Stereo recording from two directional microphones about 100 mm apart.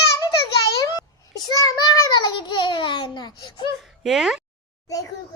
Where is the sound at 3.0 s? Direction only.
45° left (ahead or behind).